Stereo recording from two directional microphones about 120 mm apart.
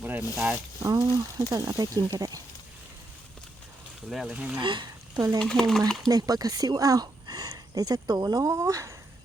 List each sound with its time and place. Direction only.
0.0 s zipper: 15° right (ahead or behind)
0.3 s speech: 10° right (ahead or behind)
0.8 s speech: 30° right (ahead or behind)
4.1 s speech: 5° right (ahead or behind)
4.6 s speech: 40° right (ahead or behind)
5.4 s speech: 5° left (ahead or behind)
6.1 s speech: 30° right (ahead or behind)